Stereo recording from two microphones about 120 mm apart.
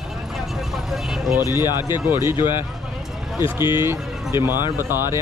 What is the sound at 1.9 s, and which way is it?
Speech, 20° right (ahead or behind).